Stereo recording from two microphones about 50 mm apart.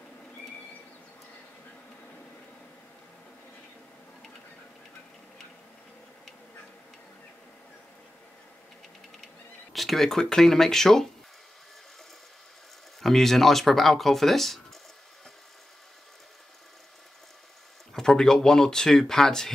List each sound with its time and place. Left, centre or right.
9.7 s speech: centre
13.0 s speech: centre
17.9 s speech: centre